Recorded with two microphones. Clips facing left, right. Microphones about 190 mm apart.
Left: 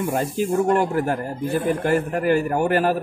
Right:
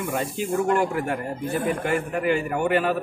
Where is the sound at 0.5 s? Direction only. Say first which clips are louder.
Left 2 dB; 30° left (ahead or behind).